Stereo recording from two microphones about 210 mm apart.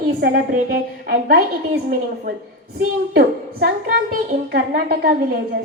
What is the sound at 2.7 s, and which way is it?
A woman's voice, 50° right (ahead or behind).